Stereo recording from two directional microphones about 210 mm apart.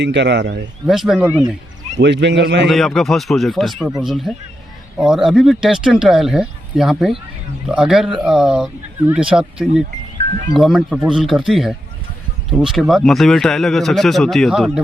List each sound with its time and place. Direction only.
0.0 s speech: 55° right (ahead or behind)
0.9 s speech: centre (ahead or behind)
2.0 s speech: 55° right (ahead or behind)
2.6 s speech: centre (ahead or behind)